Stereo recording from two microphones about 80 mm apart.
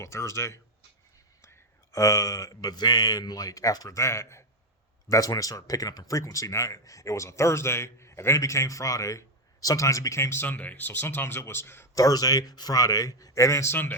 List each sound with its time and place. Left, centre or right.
0.0 s speech: left
10.4 s speech: left
11.9 s speech: left